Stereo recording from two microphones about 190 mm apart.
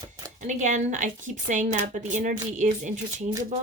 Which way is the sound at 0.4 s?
40° right (ahead or behind).